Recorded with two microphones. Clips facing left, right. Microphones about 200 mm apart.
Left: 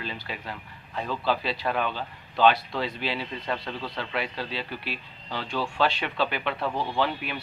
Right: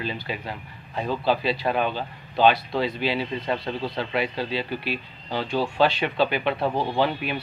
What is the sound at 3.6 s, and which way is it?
Speech, 25° right (ahead or behind).